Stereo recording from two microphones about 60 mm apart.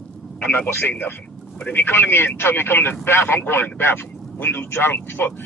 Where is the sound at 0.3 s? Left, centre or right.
Left.